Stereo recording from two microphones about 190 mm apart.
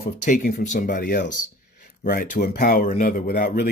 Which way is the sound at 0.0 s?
45° left (ahead or behind).